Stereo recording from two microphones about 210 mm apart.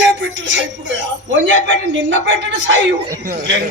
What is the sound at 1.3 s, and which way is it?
A man's voice, 60° right (ahead or behind).